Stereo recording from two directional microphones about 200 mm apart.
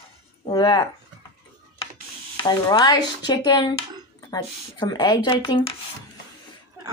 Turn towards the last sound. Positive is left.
turn(degrees=20)  # may be behind; listen again after turning